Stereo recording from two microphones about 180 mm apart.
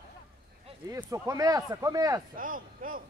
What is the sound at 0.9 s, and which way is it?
Speech, 20° right (ahead or behind).